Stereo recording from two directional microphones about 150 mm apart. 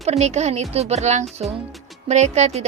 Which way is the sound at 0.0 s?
45° right (ahead or behind).